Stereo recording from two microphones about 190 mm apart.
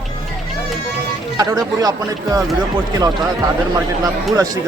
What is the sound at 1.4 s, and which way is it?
Speech, 20° right (ahead or behind).